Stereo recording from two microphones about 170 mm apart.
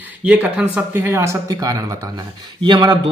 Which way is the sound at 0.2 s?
10° right (ahead or behind).